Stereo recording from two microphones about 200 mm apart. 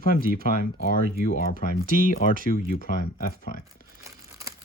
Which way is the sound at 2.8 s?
45° left (ahead or behind).